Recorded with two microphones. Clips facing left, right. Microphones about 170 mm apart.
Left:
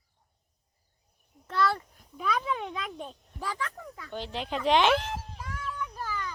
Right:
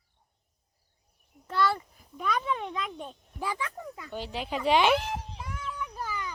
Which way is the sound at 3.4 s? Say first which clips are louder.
Right 2 dB; 15° right (ahead or behind).